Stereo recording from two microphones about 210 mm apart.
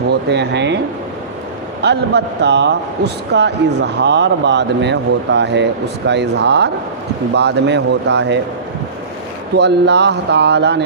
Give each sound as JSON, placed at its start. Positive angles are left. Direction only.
{"t": 0.1, "sound": "speech", "side_deg": -55}
{"t": 1.8, "sound": "a man's voice", "side_deg": -55}
{"t": 9.6, "sound": "a man's voice", "side_deg": -55}